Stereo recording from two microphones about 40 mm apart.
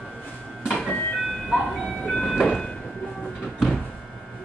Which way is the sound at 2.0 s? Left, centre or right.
Left.